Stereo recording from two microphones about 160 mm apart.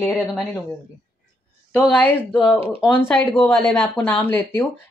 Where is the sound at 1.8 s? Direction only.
10° left (ahead or behind).